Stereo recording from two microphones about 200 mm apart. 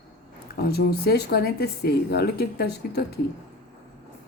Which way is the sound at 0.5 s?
50° left (ahead or behind).